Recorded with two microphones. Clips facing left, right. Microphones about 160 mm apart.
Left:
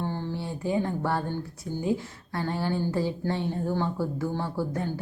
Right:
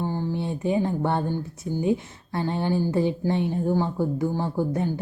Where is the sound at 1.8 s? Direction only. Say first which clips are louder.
Right 4 dB; 20° right (ahead or behind).